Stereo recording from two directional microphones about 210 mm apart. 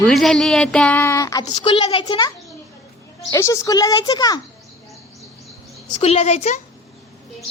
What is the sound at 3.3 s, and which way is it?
A woman's voice, 15° left (ahead or behind).